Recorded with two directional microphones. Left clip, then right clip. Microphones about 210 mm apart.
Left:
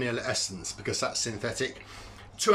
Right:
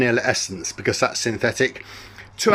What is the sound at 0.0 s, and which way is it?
Speech, 30° right (ahead or behind).